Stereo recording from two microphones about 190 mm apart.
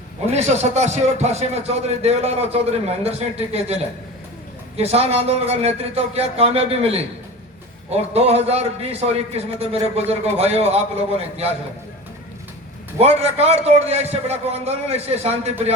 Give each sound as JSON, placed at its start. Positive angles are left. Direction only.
{"t": 0.3, "sound": "a man's voice", "side_deg": -35}
{"t": 4.8, "sound": "a man's voice", "side_deg": -35}
{"t": 13.0, "sound": "a man's voice", "side_deg": -35}